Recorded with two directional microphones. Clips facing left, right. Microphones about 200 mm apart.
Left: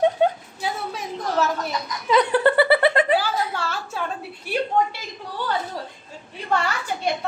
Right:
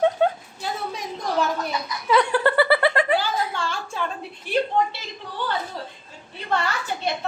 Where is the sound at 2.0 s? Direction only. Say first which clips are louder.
Left 2 dB; 20° left (ahead or behind).